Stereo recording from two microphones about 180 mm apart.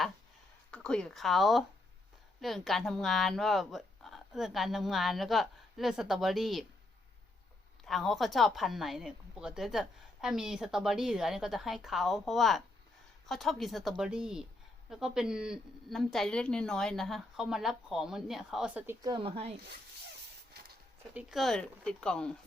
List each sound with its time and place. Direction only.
0.7 s a woman's voice: 5° left (ahead or behind)
7.9 s a woman's voice: centre (ahead or behind)
19.0 s speech: 30° right (ahead or behind)
21.1 s a woman's voice: 5° right (ahead or behind)